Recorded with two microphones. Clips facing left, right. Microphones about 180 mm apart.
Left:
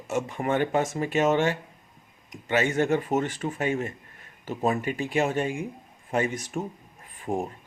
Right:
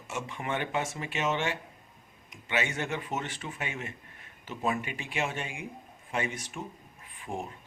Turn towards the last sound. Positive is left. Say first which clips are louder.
# left 8 dB
turn(degrees=40)  # may be behind; listen again after turning